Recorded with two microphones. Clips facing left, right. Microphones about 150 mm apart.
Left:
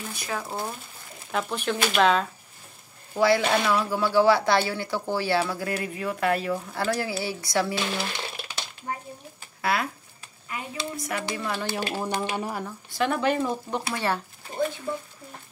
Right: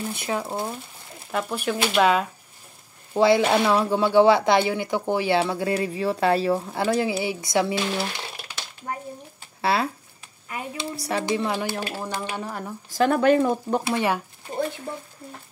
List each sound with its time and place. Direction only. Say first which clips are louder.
0.0 s speech: right 5 dB; 25° right (ahead or behind)
1.3 s speech: right 2 dB; 5° right (ahead or behind)
3.2 s speech: right 3 dB; 25° right (ahead or behind)
6.8 s speech: right 3 dB; 20° right (ahead or behind)
9.6 s speech: right 4 dB; 30° right (ahead or behind)
11.9 s speech: left 2 dB; 15° left (ahead or behind)
12.9 s speech: right 6 dB; 45° right (ahead or behind)
13.8 s speech: right 2 dB; 15° right (ahead or behind)